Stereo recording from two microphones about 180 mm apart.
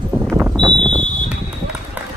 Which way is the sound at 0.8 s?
10° left (ahead or behind).